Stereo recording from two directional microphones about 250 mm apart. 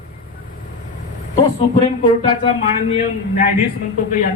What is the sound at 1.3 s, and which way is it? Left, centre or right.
A man's voice, left.